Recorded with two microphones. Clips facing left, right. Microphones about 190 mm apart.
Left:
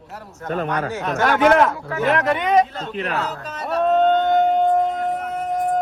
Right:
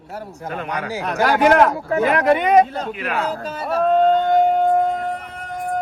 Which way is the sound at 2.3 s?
50° right (ahead or behind).